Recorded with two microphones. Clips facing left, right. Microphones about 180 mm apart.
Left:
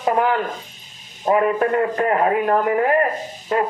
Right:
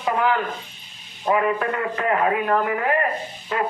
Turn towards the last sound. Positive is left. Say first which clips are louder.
# left 4 dB
turn(degrees=40)  # may be behind; listen again after turning